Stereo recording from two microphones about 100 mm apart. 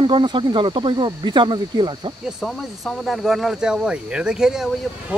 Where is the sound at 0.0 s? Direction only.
55° right (ahead or behind).